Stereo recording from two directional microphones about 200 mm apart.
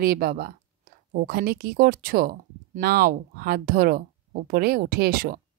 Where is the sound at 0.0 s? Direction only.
50° right (ahead or behind).